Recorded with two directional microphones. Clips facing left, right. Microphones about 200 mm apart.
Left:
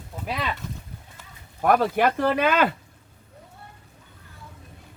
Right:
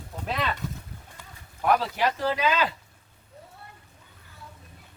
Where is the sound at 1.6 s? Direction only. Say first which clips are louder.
Left 4 dB; 50° left (ahead or behind).